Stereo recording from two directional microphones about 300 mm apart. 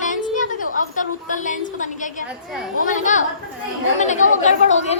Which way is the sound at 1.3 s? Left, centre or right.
Left.